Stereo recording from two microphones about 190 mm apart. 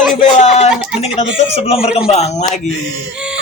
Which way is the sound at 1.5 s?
30° left (ahead or behind).